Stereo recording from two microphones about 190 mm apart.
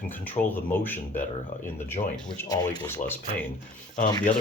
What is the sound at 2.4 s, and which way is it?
Speech, 20° left (ahead or behind).